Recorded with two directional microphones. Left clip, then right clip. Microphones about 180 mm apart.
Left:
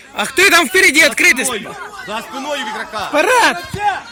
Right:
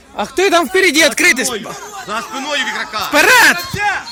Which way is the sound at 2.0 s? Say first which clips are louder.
Right 2 dB; 20° left (ahead or behind).